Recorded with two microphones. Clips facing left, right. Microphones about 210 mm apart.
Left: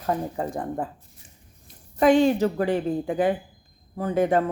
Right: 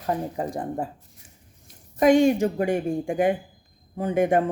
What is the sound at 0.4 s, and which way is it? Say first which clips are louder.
Speech: even; 15° right (ahead or behind).